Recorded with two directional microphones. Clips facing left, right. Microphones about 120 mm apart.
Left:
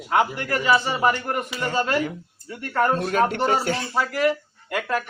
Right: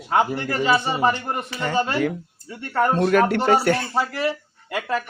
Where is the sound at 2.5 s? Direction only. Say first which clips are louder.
Right 1 dB; 25° right (ahead or behind).